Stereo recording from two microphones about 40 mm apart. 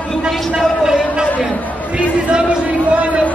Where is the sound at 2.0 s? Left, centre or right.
Right.